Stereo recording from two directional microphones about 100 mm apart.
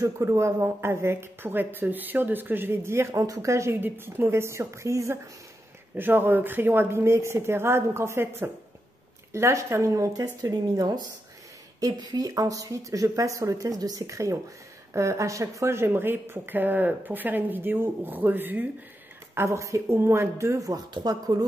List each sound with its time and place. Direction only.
0.0 s speech: 30° right (ahead or behind)